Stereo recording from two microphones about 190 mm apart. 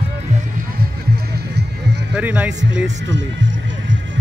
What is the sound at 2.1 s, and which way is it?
Speech, 10° right (ahead or behind).